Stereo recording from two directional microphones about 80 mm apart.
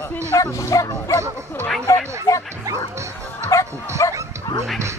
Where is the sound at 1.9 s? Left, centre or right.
Left.